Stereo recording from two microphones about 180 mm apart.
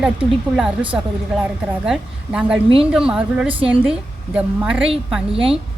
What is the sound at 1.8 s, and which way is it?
A woman's voice, 5° right (ahead or behind).